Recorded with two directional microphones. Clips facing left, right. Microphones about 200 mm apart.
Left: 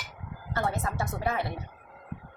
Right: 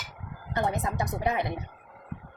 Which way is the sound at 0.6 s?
20° right (ahead or behind).